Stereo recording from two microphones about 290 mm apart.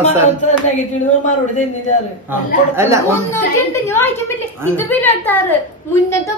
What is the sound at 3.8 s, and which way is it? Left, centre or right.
A woman's voice, centre.